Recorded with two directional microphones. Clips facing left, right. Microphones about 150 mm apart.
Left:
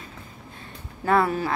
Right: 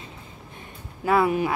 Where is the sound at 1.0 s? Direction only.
10° right (ahead or behind).